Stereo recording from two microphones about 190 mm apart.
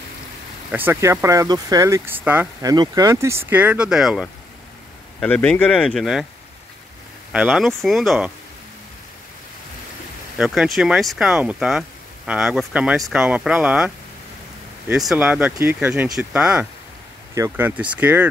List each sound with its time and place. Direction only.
0.7 s speech: 10° right (ahead or behind)
2.7 s speech: 20° right (ahead or behind); by 6.2 s centre (ahead or behind)
7.3 s speech: 5° right (ahead or behind)
10.3 s speech: 5° right (ahead or behind)
15.0 s speech: 5° right (ahead or behind)